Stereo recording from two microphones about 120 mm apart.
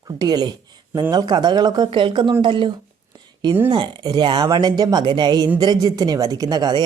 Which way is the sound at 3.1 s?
40° right (ahead or behind).